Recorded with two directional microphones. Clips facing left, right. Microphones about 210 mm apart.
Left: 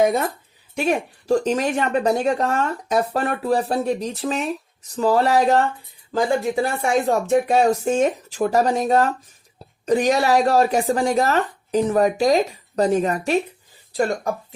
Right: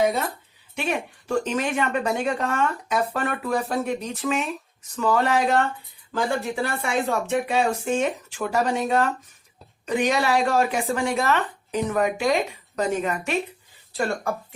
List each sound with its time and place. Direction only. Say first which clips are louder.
0.0 s a woman's voice: left 4 dB; 45° left (ahead or behind)